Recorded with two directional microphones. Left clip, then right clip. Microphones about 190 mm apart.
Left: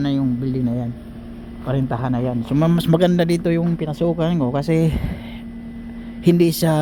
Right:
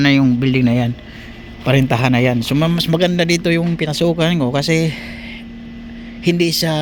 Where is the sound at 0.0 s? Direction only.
5° right (ahead or behind).